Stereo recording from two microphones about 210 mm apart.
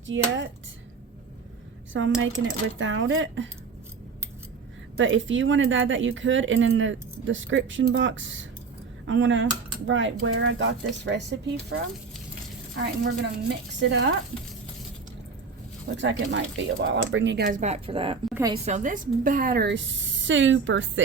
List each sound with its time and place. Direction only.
1.9 s speech: 65° right (ahead or behind)
4.9 s speech: 65° right (ahead or behind)
16.0 s speech: 60° right (ahead or behind)